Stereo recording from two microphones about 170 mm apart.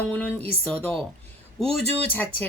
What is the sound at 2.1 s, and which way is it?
Speech, 10° left (ahead or behind).